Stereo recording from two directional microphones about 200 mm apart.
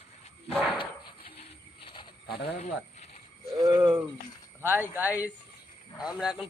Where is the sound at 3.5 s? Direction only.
20° right (ahead or behind).